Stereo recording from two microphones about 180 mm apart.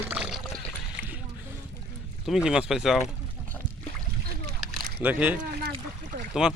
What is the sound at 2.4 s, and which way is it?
Speech, 5° right (ahead or behind).